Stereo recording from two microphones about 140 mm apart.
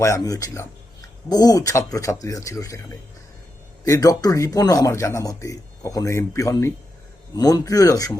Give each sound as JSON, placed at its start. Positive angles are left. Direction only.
{"t": 0.0, "sound": "speech", "side_deg": 25}